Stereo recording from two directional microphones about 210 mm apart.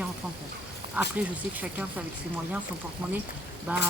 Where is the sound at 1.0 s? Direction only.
5° right (ahead or behind).